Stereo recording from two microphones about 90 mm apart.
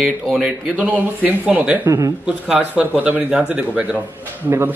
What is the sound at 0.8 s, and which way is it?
A man's voice, 15° right (ahead or behind).